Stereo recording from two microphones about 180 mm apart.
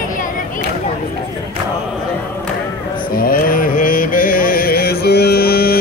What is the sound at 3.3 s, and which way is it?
Mantra, 50° left (ahead or behind).